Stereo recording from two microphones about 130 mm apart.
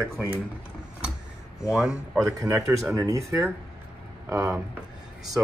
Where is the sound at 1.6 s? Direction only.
5° right (ahead or behind).